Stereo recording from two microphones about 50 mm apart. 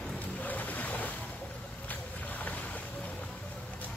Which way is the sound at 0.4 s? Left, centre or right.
Left.